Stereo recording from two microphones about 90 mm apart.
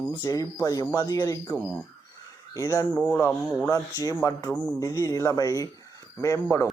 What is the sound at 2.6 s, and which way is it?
Speech, 35° left (ahead or behind).